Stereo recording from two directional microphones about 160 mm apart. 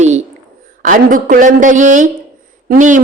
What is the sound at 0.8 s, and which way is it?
A man's voice, 55° right (ahead or behind).